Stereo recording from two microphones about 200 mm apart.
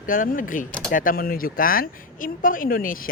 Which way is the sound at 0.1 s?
45° left (ahead or behind).